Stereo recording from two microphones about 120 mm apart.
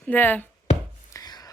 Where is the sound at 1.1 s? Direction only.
30° left (ahead or behind).